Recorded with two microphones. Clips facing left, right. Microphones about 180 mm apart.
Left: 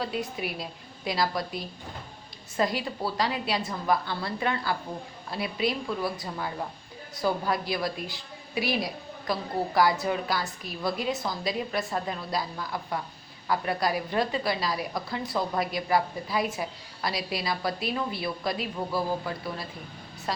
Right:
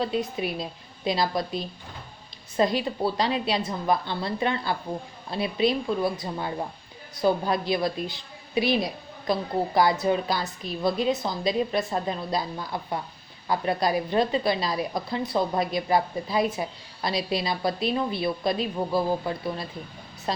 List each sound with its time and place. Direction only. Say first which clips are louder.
0.0 s a woman's voice: right 4 dB; 25° right (ahead or behind)